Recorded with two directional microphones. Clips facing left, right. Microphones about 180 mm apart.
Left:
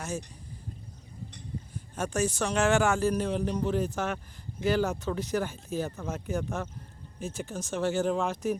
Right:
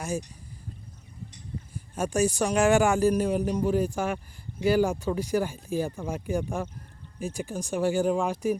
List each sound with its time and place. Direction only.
1.7 s a man's voice: 10° right (ahead or behind)